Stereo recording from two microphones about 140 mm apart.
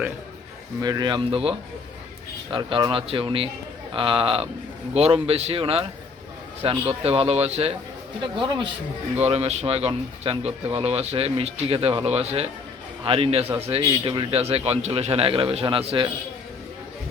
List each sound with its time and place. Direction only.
0.8 s speech: 30° right (ahead or behind); by 7.8 s 45° right (ahead or behind)
9.2 s speech: 45° right (ahead or behind)